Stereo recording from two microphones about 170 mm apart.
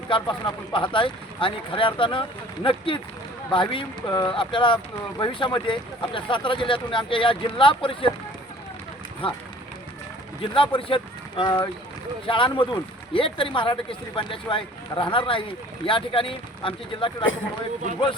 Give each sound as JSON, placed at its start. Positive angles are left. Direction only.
{"t": 0.1, "sound": "speech", "side_deg": 30}
{"t": 9.2, "sound": "speech", "side_deg": 30}
{"t": 10.4, "sound": "speech", "side_deg": 30}